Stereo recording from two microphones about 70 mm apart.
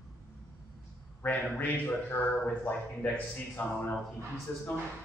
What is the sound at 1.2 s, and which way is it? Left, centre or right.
A man's voice, left.